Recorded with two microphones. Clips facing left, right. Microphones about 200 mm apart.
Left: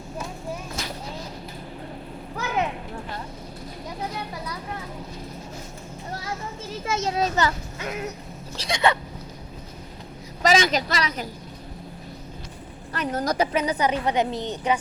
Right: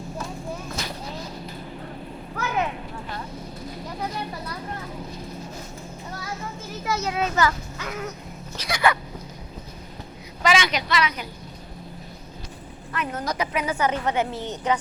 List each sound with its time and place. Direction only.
6.8 s a sound: 30° left (ahead or behind)
7.4 s speech: 25° left (ahead or behind)
10.4 s a woman's voice: 40° left (ahead or behind)
12.9 s a woman's voice: 35° left (ahead or behind)
13.7 s a woman's voice: 15° left (ahead or behind)